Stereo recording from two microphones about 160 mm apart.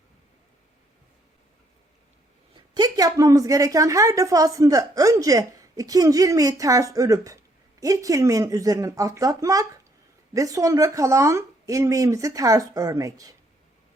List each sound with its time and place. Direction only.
2.7 s a woman's voice: 25° right (ahead or behind)